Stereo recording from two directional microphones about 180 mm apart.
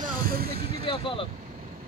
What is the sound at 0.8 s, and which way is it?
Vehicle, 30° left (ahead or behind).